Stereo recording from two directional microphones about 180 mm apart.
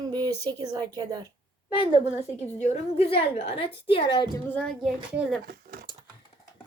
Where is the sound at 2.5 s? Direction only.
35° left (ahead or behind).